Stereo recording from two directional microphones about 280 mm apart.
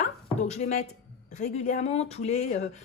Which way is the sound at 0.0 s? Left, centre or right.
Left.